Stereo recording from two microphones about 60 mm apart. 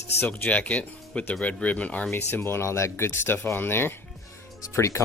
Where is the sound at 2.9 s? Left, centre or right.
Left.